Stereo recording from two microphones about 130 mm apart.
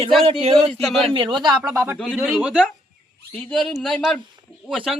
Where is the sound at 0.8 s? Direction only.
Centre (ahead or behind).